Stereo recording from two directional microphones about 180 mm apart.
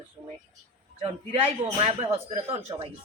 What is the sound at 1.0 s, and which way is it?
A man's voice, 30° right (ahead or behind).